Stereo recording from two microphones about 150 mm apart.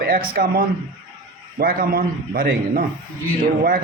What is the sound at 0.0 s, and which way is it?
A man's voice, 75° right (ahead or behind).